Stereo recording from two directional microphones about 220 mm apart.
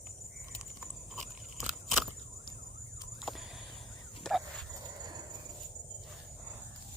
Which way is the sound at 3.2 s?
Centre (ahead or behind).